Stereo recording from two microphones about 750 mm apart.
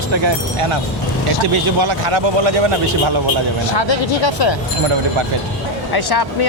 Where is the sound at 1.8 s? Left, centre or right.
Right.